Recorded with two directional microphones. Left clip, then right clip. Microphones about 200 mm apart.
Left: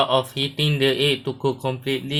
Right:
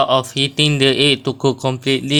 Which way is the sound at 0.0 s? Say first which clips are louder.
Right 5 dB; 45° right (ahead or behind).